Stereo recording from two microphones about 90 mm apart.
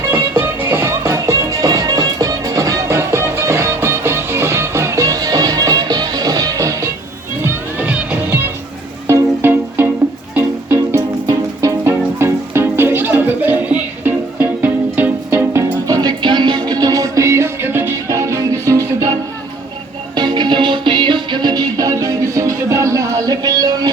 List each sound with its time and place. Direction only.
0.1 s music: 25° right (ahead or behind)
7.4 s music: 20° right (ahead or behind)
11.3 s music: 40° right (ahead or behind)
11.9 s music: 25° right (ahead or behind)
15.9 s music: 50° right (ahead or behind); by 18.2 s 25° right (ahead or behind)
18.2 s music: 35° right (ahead or behind)
20.1 s music: 55° right (ahead or behind)